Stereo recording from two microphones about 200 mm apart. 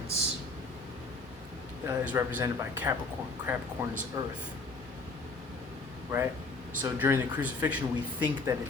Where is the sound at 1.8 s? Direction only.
10° right (ahead or behind).